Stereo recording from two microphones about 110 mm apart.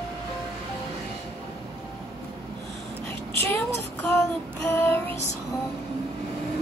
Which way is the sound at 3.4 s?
20° left (ahead or behind).